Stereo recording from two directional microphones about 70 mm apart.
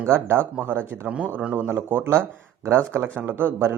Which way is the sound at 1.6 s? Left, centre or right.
Right.